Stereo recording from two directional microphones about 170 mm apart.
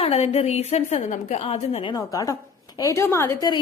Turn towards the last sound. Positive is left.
turn(degrees=20)  # may be behind; listen again after turning